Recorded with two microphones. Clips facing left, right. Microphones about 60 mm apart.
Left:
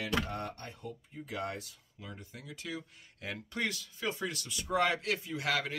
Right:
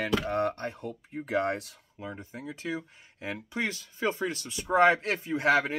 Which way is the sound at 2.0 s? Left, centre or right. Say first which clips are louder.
Right 8 dB; right.